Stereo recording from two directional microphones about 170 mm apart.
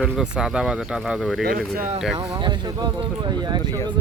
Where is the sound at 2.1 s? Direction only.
25° right (ahead or behind).